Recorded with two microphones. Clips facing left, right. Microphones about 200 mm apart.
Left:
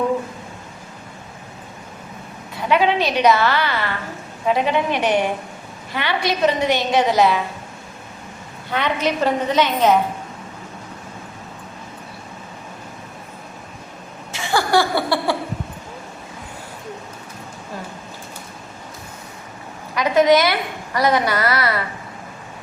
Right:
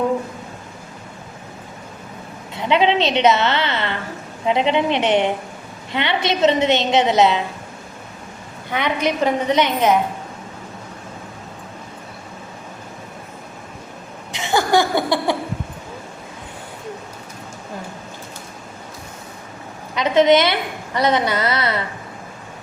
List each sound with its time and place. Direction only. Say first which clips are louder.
2.6 s a woman's voice: right 1 dB; 25° right (ahead or behind)
8.7 s a woman's voice: even; 15° right (ahead or behind)
14.3 s laughter: right 1 dB; 20° right (ahead or behind)
20.0 s a woman's voice: right 1 dB; 25° right (ahead or behind)